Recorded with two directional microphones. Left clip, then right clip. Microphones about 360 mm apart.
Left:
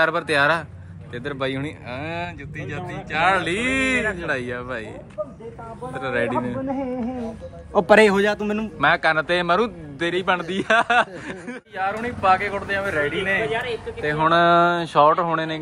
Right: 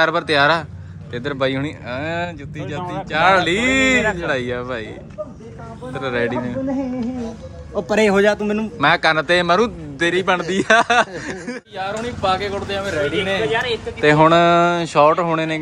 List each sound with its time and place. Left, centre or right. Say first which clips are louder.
0.0 s speech: right 3 dB; centre
5.9 s speech: right 2 dB; centre
7.8 s speech: even; centre
13.5 s speech: right 5 dB; right
14.2 s speech: right 1 dB; centre